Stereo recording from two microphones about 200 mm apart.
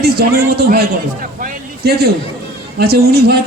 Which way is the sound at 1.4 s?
45° right (ahead or behind).